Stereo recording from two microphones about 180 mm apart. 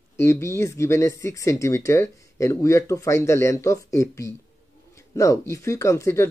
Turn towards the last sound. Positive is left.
turn(degrees=15)  # may be behind; listen again after turning